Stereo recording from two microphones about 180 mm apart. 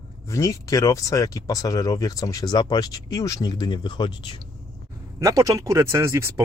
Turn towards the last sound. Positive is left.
turn(degrees=-15)  # may be behind; listen again after turning